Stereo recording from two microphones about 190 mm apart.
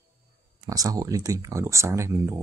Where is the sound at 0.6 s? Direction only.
20° right (ahead or behind).